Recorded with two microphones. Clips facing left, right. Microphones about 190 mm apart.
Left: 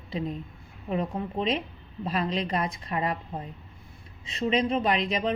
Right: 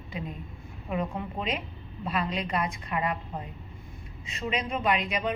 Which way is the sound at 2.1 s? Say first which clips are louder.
Left 2 dB; 35° left (ahead or behind).